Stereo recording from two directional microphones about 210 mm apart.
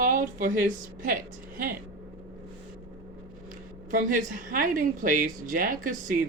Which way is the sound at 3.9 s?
40° right (ahead or behind).